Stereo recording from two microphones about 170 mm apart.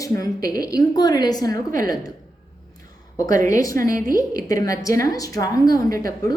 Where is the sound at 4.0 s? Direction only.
55° right (ahead or behind).